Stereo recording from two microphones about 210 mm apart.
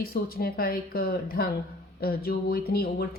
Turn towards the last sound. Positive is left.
turn(degrees=50)  # may be behind; listen again after turning